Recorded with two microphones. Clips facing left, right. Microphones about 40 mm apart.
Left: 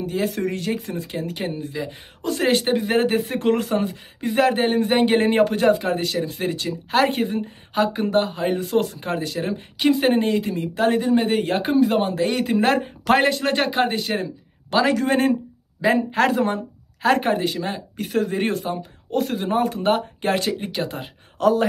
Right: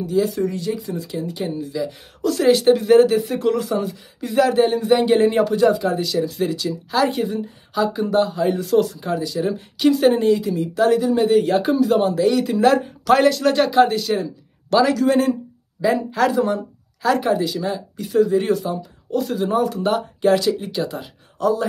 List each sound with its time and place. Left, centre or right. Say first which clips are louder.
0.0 s speech: right 4 dB; left
1.5 s speech: right 3 dB; left
9.8 s speech: right 2 dB; left
21.4 s speech: left 2 dB; left